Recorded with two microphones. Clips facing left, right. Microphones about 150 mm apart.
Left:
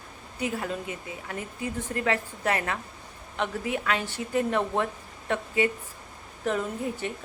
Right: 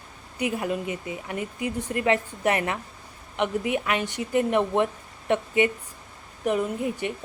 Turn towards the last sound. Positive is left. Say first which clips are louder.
# right 3 dB
turn(degrees=-15)  # may be behind; listen again after turning